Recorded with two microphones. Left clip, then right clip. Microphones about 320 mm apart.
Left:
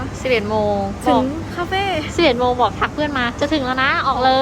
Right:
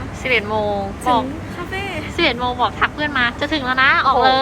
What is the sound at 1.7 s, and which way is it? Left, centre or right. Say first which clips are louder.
Speech: left 6 dB; left.